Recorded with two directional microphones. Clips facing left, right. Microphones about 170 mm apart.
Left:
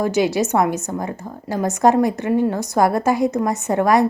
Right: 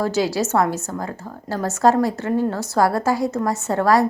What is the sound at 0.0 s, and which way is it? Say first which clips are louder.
A woman's voice: left 2 dB; 20° left (ahead or behind).